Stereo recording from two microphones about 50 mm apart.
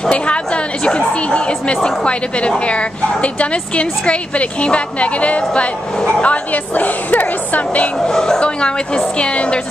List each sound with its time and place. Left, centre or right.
0.8 s a woman's voice: left
8.0 s a woman's voice: centre